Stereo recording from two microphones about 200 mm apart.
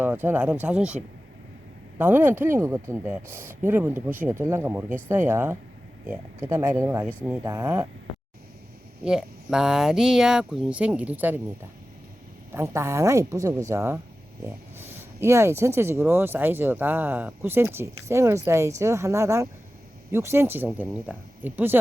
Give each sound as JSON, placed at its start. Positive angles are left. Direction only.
{"t": 0.0, "sound": "speech", "side_deg": -10}
{"t": 2.0, "sound": "speech", "side_deg": -10}
{"t": 9.0, "sound": "speech", "side_deg": -5}
{"t": 12.5, "sound": "speech", "side_deg": -15}